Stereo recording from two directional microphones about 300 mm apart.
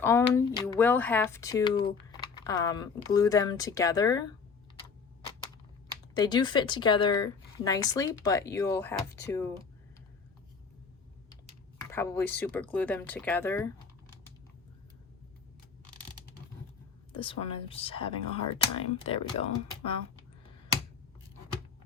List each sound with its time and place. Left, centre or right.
0.0 s speech: centre
6.1 s speech: centre
11.8 s speech: centre
17.1 s speech: centre